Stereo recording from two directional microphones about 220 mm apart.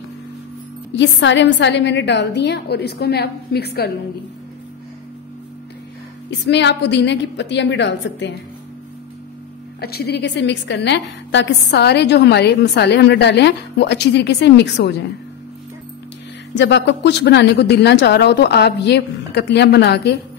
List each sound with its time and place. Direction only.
0.9 s a woman's voice: 55° left (ahead or behind)
6.4 s a woman's voice: 50° left (ahead or behind)
9.8 s a woman's voice: 45° left (ahead or behind)
16.5 s a woman's voice: 55° left (ahead or behind)